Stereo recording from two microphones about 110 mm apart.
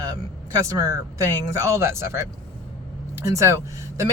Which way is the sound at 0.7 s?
30° right (ahead or behind).